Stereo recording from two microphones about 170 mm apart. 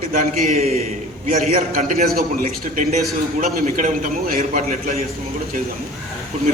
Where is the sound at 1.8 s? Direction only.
45° right (ahead or behind).